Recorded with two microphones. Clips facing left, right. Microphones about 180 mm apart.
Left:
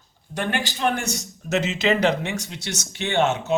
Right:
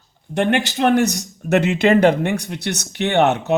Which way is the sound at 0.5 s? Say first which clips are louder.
Right 8 dB; 65° right (ahead or behind).